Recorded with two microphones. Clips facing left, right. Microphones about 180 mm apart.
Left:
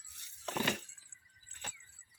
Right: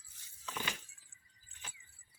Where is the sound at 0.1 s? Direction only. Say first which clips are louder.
Left 6 dB; 65° left (ahead or behind).